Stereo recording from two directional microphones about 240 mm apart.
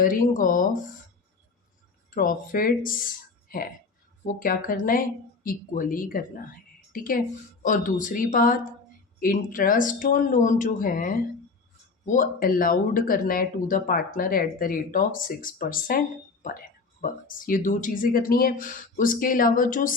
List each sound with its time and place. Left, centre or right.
0.0 s speech: left
2.0 s speech: left